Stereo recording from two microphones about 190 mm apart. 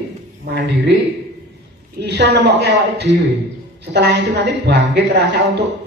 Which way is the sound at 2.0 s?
65° right (ahead or behind).